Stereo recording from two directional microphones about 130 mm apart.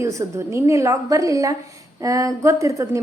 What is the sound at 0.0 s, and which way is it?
A woman's voice, 25° right (ahead or behind).